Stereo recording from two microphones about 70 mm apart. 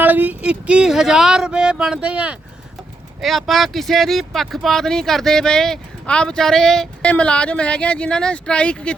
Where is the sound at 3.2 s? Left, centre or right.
Centre.